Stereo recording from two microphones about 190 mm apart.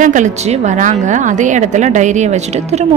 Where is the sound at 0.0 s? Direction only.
40° right (ahead or behind).